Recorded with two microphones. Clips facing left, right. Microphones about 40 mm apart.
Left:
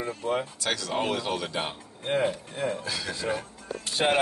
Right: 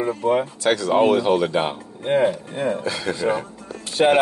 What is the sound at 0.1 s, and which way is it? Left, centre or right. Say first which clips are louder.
Speech: right 8 dB; right.